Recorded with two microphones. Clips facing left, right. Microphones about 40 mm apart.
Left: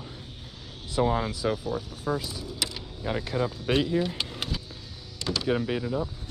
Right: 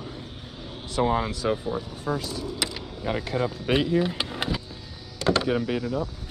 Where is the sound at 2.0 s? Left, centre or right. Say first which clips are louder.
Right 2 dB; centre.